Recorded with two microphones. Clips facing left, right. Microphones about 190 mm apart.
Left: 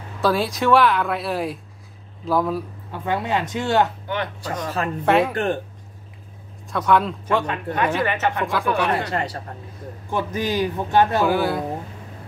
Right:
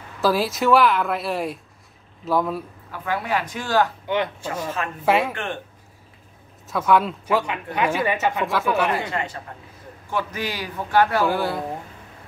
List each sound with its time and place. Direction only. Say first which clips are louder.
0.2 s speech: even; centre (ahead or behind)
2.9 s a man's voice: left 2 dB; 25° left (ahead or behind)
5.0 s speech: left 2 dB; centre (ahead or behind)
5.3 s speech: left 7 dB; 40° left (ahead or behind)
6.7 s speech: even; centre (ahead or behind)
9.1 s speech: left 3 dB; 40° left (ahead or behind)
10.0 s a man's voice: left 3 dB; 20° left (ahead or behind)
11.2 s speech: left 3 dB; centre (ahead or behind)